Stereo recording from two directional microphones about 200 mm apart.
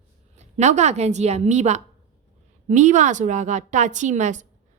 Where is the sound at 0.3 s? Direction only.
35° right (ahead or behind).